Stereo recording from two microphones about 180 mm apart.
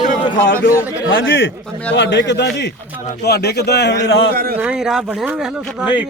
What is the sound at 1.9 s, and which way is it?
A man's voice, 75° left (ahead or behind).